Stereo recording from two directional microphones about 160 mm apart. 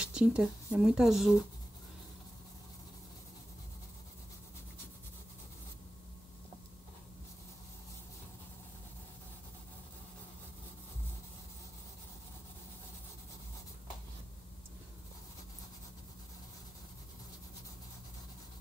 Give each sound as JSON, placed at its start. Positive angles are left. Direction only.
{"t": 0.0, "sound": "speech", "side_deg": -5}